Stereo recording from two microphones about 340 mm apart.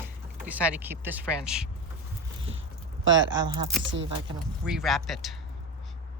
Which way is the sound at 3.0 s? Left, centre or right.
Right.